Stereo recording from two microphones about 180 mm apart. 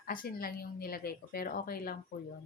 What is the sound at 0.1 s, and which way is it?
Speech, 55° left (ahead or behind).